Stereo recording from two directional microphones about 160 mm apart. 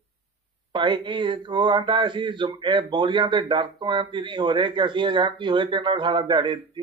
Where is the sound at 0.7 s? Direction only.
30° right (ahead or behind).